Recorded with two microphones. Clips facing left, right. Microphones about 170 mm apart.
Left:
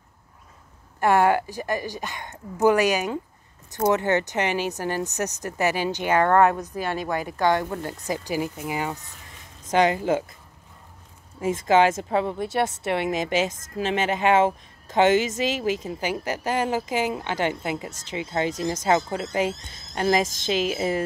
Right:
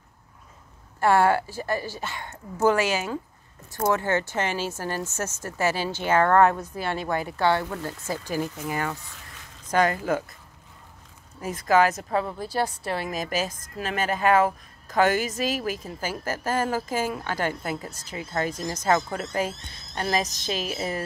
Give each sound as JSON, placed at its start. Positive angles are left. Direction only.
{"t": 1.0, "sound": "a woman's voice", "side_deg": 15}
{"t": 11.4, "sound": "a woman's voice", "side_deg": 25}